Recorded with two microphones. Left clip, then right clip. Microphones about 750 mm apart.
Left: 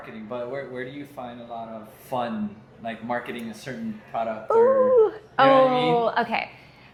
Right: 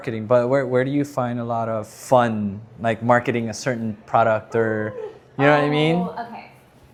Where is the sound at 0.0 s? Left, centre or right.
Right.